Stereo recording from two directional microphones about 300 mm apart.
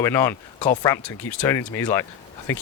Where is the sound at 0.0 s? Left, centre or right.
Centre.